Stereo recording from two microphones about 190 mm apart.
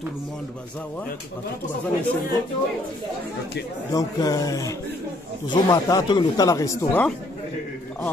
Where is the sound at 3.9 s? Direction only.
20° left (ahead or behind).